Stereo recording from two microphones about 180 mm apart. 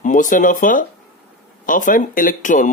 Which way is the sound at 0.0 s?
45° left (ahead or behind).